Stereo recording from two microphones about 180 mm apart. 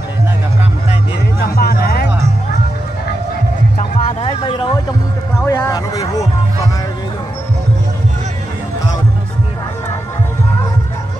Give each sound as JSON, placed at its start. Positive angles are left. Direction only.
{"t": 1.4, "sound": "music", "side_deg": 55}
{"t": 3.7, "sound": "music", "side_deg": 30}
{"t": 5.4, "sound": "a sound", "side_deg": 10}